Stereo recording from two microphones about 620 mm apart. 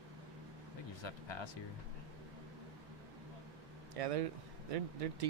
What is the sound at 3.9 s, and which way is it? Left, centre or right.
Speech, right.